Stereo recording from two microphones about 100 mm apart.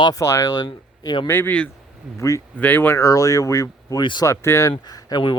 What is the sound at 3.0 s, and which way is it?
Speech, 35° left (ahead or behind).